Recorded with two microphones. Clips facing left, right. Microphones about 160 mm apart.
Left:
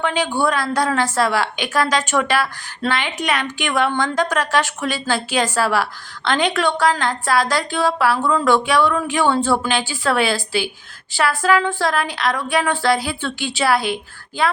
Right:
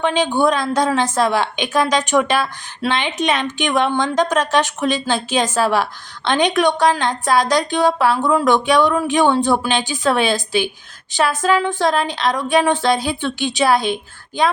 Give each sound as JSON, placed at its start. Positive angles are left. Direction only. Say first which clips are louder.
{"t": 0.0, "sound": "a woman's voice", "louder": "right 3 dB", "side_deg": -20}